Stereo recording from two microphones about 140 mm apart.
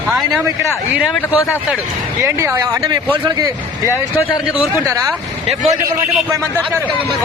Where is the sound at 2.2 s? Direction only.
20° right (ahead or behind).